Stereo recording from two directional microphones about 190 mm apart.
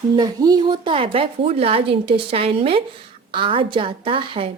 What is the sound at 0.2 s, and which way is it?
Speech, 20° right (ahead or behind).